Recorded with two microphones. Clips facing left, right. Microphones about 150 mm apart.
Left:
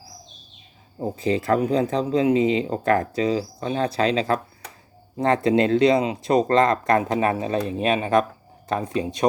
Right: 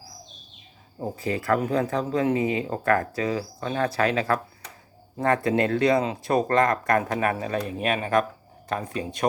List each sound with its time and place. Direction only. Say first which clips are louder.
1.0 s speech: left 4 dB; 20° left (ahead or behind)